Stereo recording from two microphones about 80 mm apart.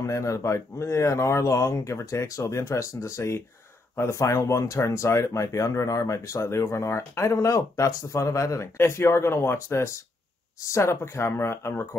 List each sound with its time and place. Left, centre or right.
0.0 s speech: left